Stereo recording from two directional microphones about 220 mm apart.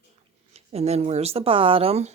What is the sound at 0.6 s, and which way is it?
Speech, 30° right (ahead or behind).